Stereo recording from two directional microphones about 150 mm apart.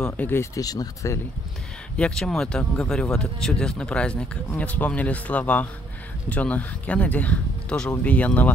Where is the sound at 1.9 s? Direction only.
5° left (ahead or behind).